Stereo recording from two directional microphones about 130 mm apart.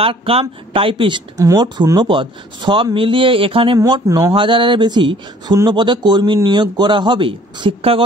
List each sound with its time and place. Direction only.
0.0 s speech: 45° right (ahead or behind)
1.3 s speech: 25° right (ahead or behind)
1.6 s a man's voice: 35° right (ahead or behind)
3.8 s a man's voice: 30° right (ahead or behind); by 8.0 s 45° right (ahead or behind)